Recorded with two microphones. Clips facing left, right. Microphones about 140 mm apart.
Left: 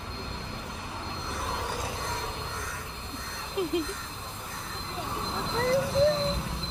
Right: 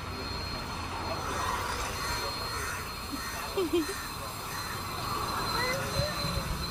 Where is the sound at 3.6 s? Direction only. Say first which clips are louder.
Even; 30° right (ahead or behind).